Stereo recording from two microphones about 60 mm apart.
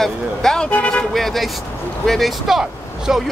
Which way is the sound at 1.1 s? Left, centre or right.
Centre.